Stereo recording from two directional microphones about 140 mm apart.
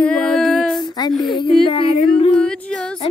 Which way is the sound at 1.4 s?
40° left (ahead or behind).